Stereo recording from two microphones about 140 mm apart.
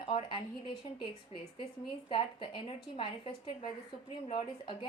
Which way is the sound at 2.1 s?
35° left (ahead or behind).